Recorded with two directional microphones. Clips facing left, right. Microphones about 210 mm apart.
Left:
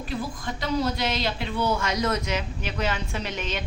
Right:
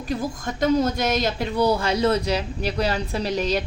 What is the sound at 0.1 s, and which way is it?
A woman's voice, 45° right (ahead or behind).